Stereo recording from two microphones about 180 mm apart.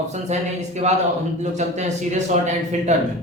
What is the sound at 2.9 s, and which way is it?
Speech, 40° right (ahead or behind).